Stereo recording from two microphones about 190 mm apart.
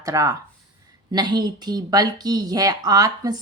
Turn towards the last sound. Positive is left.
turn(degrees=-20)  # may be behind; listen again after turning